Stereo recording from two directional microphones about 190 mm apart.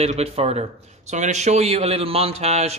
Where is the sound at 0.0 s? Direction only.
35° right (ahead or behind).